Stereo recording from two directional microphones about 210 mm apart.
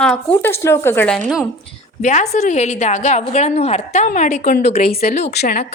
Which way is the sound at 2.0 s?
35° left (ahead or behind).